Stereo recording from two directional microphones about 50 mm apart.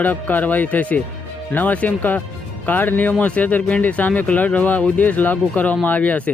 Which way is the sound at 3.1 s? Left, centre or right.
Left.